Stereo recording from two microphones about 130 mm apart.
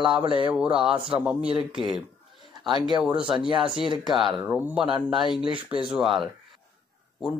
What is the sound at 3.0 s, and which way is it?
Speech, 10° right (ahead or behind).